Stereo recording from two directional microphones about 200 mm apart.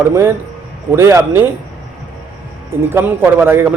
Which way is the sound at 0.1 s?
15° right (ahead or behind).